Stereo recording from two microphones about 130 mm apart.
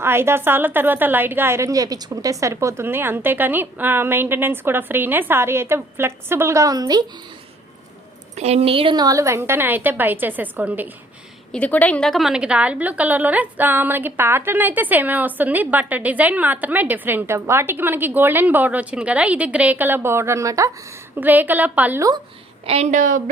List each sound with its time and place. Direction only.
0.0 s a woman's voice: 20° right (ahead or behind)
8.4 s a woman's voice: 55° right (ahead or behind)
9.0 s a woman's voice: 25° right (ahead or behind)
11.5 s a woman's voice: 10° left (ahead or behind); by 22.0 s 10° right (ahead or behind)
22.6 s a woman's voice: 50° right (ahead or behind)
22.9 s a woman's voice: 80° right